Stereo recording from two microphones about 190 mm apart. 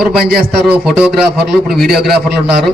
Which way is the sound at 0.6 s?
5° right (ahead or behind).